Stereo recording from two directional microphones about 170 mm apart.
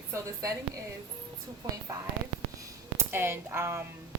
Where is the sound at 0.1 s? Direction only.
20° right (ahead or behind).